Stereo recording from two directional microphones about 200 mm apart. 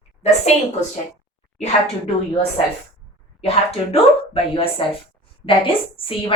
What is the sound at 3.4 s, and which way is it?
A woman's voice, 30° left (ahead or behind).